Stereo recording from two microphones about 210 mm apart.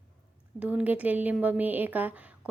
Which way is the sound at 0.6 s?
5° right (ahead or behind).